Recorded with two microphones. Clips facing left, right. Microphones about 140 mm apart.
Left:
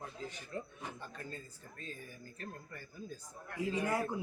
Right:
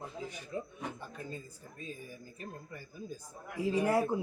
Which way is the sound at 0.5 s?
15° right (ahead or behind).